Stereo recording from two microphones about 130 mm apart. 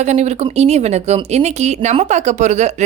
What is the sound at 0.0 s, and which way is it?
A woman's voice, 60° right (ahead or behind).